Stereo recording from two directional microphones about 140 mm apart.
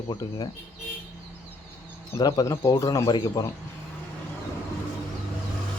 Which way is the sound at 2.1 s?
30° left (ahead or behind).